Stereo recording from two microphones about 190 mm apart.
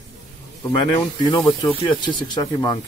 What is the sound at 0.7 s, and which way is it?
Speech, 20° left (ahead or behind).